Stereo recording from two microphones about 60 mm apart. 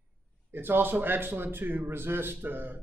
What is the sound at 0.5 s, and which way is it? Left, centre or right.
A man's voice, right.